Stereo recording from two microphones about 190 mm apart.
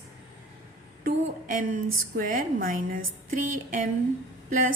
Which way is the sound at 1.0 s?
45° right (ahead or behind).